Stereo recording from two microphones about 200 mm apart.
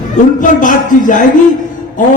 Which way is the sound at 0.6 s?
40° left (ahead or behind).